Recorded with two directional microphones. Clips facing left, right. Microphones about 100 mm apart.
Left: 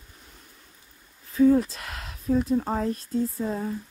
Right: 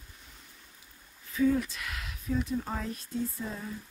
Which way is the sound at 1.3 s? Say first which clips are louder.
Left 8 dB; 35° left (ahead or behind).